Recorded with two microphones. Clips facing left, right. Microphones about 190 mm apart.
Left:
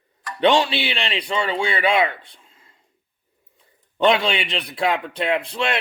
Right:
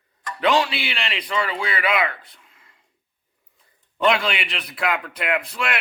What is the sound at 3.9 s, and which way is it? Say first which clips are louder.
A man's voice: left 2 dB; 25° left (ahead or behind).